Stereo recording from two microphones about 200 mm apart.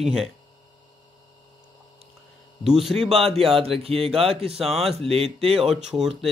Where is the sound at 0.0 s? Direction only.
5° right (ahead or behind).